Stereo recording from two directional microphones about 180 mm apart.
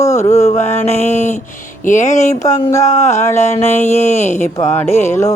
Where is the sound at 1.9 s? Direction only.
45° left (ahead or behind).